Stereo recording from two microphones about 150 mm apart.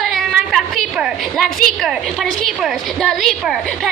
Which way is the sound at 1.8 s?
Centre (ahead or behind).